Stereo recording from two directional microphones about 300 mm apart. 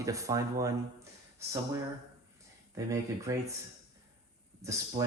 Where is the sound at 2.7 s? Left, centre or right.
Centre.